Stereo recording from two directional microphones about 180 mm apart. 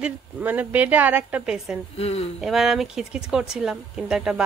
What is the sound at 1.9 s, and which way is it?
Speech, 35° left (ahead or behind).